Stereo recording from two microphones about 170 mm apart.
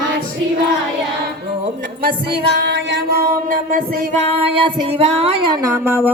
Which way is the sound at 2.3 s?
80° right.